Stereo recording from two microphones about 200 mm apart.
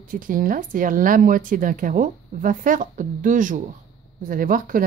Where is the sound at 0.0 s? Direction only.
45° right (ahead or behind).